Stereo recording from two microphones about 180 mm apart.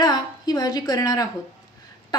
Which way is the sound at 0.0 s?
20° left (ahead or behind).